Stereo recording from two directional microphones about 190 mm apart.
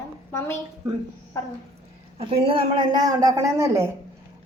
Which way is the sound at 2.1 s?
30° right (ahead or behind).